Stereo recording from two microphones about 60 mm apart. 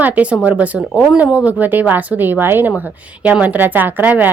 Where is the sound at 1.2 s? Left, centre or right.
Right.